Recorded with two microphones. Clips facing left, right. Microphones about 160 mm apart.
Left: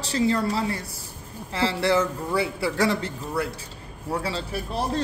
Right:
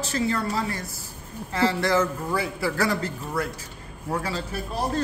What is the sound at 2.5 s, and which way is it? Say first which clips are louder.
Speech: left 1 dB; 30° left (ahead or behind).